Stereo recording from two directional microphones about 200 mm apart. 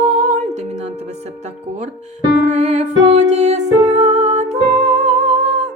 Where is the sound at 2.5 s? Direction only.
35° right (ahead or behind).